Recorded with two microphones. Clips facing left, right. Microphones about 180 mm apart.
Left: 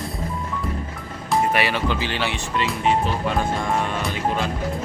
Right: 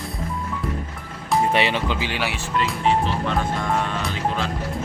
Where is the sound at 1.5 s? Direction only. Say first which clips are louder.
Even; 20° right (ahead or behind); by 3.3 s centre (ahead or behind).